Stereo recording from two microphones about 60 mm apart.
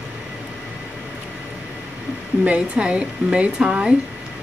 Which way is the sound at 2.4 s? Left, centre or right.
Right.